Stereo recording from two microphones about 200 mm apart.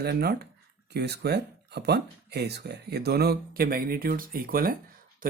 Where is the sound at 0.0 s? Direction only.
50° right (ahead or behind).